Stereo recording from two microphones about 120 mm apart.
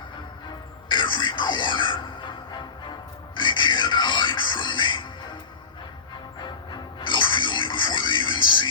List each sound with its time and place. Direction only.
0.9 s music: 40° left (ahead or behind)
6.4 s music: 40° left (ahead or behind)